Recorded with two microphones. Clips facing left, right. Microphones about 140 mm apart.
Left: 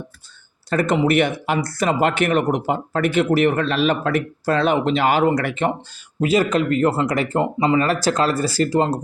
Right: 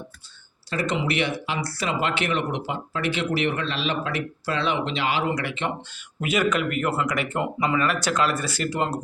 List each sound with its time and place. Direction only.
0.7 s speech: 50° left (ahead or behind)
6.1 s speech: 35° left (ahead or behind)